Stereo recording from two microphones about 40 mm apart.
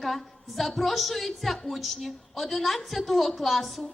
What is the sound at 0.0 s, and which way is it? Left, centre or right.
A woman's voice, centre.